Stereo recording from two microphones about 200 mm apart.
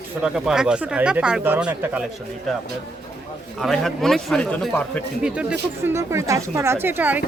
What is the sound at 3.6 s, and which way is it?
A woman's voice, centre (ahead or behind).